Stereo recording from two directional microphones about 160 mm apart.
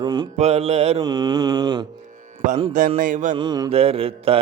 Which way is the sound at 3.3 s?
30° right (ahead or behind).